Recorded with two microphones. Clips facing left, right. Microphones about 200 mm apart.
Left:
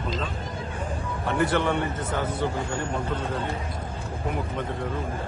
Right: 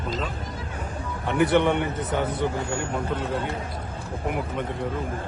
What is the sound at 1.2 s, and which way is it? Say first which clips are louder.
Speech: right 4 dB; 20° right (ahead or behind).